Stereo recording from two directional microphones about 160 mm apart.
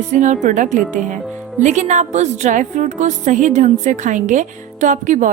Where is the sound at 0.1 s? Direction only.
50° right (ahead or behind).